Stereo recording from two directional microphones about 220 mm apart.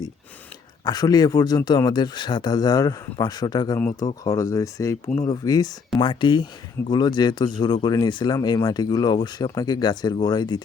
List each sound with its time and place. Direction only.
0.9 s speech: 15° left (ahead or behind)